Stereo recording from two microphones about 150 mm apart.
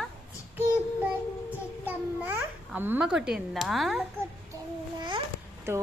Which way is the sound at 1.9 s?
15° right (ahead or behind).